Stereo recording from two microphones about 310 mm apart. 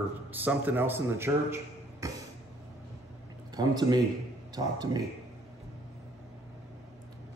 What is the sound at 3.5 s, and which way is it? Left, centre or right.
A man's voice, centre.